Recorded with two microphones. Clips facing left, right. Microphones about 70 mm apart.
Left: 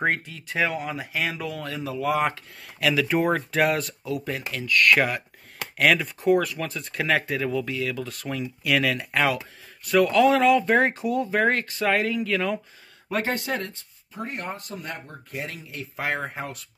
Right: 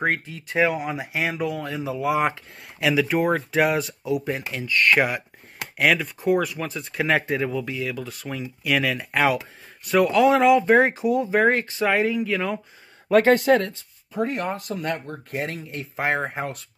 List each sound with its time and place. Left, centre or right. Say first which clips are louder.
0.0 s speech: right 1 dB; centre
9.3 s speech: right 3 dB; centre
13.1 s speech: right 11 dB; right
15.3 s speech: right 5 dB; right
15.8 s speech: right 4 dB; right